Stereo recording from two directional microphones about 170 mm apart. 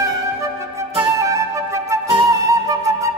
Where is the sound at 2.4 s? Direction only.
20° right (ahead or behind).